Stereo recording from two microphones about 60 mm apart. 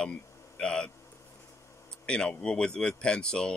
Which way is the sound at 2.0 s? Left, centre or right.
Centre.